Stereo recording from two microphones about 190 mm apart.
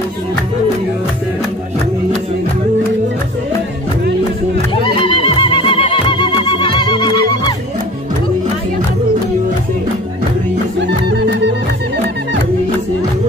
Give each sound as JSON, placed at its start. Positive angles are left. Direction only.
{"t": 4.8, "sound": "neigh", "side_deg": 30}